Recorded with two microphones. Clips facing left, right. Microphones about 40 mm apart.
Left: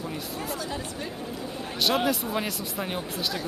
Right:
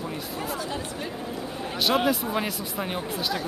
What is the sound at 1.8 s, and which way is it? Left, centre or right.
Speech, centre.